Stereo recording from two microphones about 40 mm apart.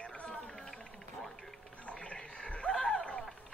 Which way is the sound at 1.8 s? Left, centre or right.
Left.